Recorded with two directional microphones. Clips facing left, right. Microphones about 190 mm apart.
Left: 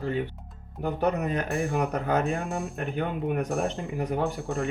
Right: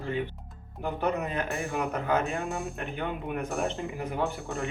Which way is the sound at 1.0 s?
40° left (ahead or behind).